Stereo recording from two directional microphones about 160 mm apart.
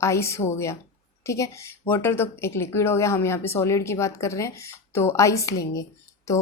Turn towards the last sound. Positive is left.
turn(degrees=20)  # may be behind; listen again after turning